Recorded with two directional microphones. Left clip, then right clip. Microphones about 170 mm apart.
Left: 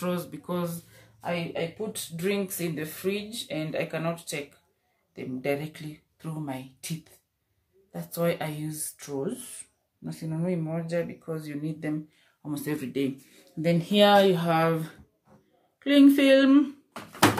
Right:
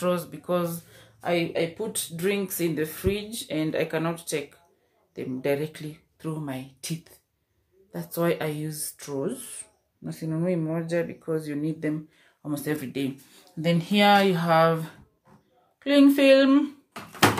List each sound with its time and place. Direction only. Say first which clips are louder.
0.0 s speech: right 5 dB; 10° right (ahead or behind)